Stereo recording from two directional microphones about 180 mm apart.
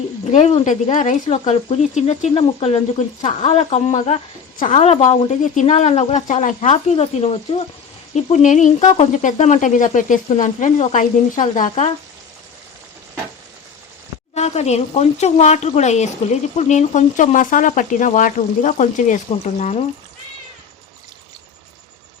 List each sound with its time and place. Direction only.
0.6 s speech: 45° left (ahead or behind)
14.3 s speech: 35° left (ahead or behind)